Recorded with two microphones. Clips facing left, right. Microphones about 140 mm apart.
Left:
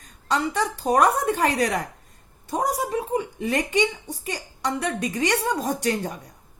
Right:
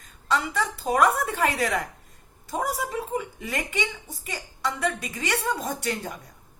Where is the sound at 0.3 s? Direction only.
35° left (ahead or behind).